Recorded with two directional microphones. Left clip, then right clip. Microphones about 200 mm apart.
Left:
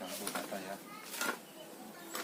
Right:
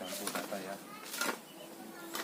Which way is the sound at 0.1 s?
20° right (ahead or behind).